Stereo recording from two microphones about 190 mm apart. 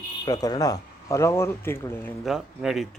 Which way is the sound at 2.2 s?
Centre (ahead or behind).